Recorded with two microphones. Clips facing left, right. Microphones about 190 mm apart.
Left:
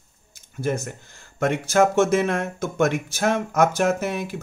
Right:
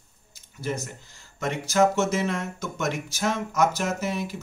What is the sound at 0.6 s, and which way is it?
A man's voice, 50° left (ahead or behind).